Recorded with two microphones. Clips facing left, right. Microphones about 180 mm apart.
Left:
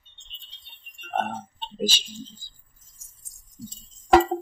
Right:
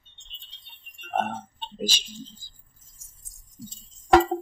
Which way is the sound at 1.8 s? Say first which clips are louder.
Left 4 dB; 30° left (ahead or behind).